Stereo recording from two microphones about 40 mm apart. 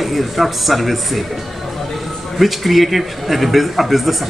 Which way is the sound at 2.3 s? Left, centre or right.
Centre.